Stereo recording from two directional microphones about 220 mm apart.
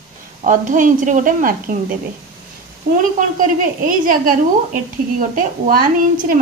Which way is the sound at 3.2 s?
35° right (ahead or behind).